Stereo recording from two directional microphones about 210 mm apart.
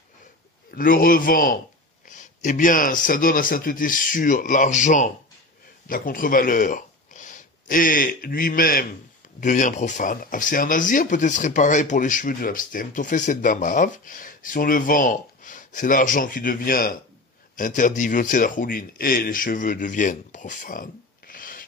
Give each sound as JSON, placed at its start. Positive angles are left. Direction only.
{"t": 0.7, "sound": "speech", "side_deg": 40}